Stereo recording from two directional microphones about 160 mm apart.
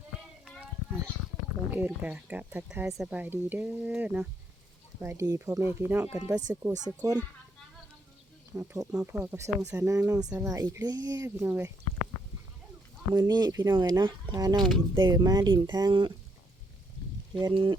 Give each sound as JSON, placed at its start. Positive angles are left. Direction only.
{"t": 1.7, "sound": "speech", "side_deg": -10}
{"t": 8.5, "sound": "speech", "side_deg": -15}
{"t": 9.9, "sound": "speech", "side_deg": -20}
{"t": 13.1, "sound": "speech", "side_deg": -25}
{"t": 17.4, "sound": "speech", "side_deg": -30}